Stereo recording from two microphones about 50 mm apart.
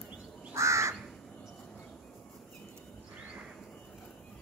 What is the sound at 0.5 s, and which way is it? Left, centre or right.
Crow, right.